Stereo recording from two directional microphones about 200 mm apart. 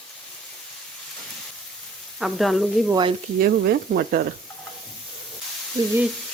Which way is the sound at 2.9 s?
25° right (ahead or behind).